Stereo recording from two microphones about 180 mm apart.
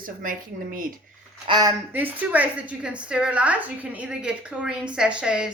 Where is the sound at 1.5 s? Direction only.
20° right (ahead or behind).